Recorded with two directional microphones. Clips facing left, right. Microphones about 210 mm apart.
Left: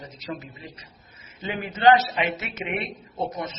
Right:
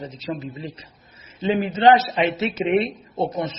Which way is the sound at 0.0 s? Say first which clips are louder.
Right 6 dB; 25° right (ahead or behind).